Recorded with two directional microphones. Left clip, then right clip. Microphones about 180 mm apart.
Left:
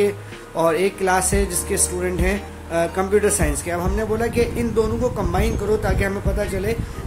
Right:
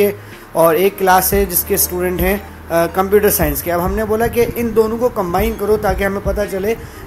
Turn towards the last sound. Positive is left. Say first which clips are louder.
# right 6 dB
turn(degrees=-15)  # may be behind; listen again after turning